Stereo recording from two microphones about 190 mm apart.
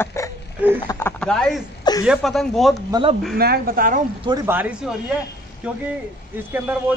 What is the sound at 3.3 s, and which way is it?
Speech, 55° right (ahead or behind).